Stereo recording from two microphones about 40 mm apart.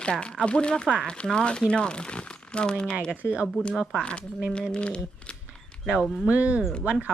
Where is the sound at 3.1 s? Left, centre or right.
Right.